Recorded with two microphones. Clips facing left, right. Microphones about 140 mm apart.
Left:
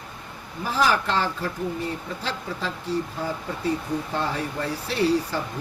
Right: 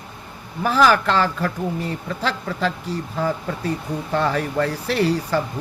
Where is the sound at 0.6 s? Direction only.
80° right.